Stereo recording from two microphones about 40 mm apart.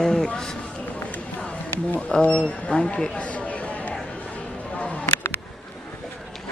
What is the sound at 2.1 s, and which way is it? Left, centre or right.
Speech, left.